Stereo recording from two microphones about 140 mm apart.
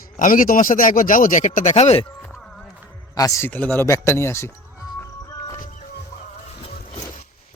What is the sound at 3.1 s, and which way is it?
Speech, 25° left (ahead or behind).